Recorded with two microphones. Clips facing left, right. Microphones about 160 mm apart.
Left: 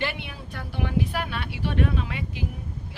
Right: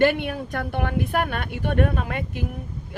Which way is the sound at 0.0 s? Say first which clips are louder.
Right 12 dB; 50° right (ahead or behind).